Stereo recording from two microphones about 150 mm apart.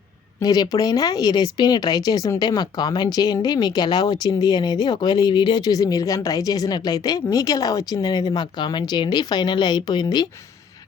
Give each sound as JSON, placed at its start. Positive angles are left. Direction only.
{"t": 0.3, "sound": "speech", "side_deg": 25}